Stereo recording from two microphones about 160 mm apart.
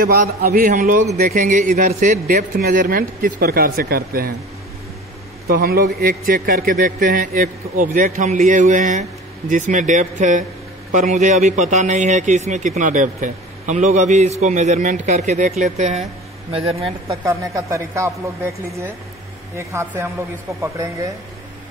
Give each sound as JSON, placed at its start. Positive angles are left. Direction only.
{"t": 0.0, "sound": "a man's voice", "side_deg": -65}
{"t": 5.5, "sound": "a man's voice", "side_deg": -70}
{"t": 17.1, "sound": "speech", "side_deg": -20}